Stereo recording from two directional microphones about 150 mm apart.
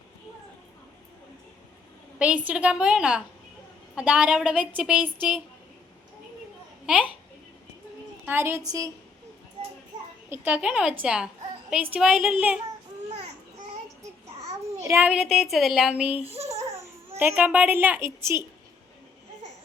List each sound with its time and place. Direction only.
2.1 s a woman's voice: 10° right (ahead or behind)
6.8 s a child's voice: 5° right (ahead or behind)
8.2 s a woman's voice: 15° right (ahead or behind)
10.2 s a woman's voice: 15° right (ahead or behind)
14.8 s a child's voice: 15° right (ahead or behind)
16.2 s a child's voice: 40° right (ahead or behind)
16.5 s baby cry: 20° right (ahead or behind)
17.2 s a woman's voice: 10° right (ahead or behind)